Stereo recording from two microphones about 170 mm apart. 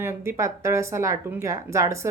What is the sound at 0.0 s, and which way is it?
Speech, 15° right (ahead or behind).